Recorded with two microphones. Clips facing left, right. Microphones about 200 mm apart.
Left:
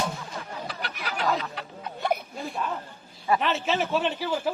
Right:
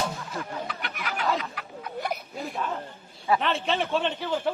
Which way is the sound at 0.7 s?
35° left (ahead or behind).